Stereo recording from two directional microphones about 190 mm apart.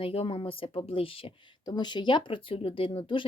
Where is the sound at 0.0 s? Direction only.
30° left (ahead or behind).